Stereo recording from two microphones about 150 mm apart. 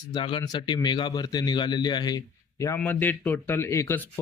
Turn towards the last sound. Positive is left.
turn(degrees=20)  # may be behind; listen again after turning